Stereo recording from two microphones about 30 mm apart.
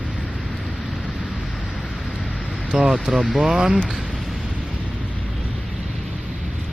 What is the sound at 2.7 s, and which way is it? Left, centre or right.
Music, right.